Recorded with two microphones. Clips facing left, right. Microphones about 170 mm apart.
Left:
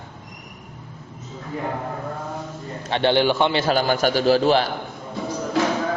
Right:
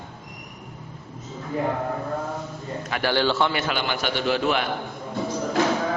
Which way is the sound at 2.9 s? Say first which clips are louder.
Left 5 dB; 25° left (ahead or behind).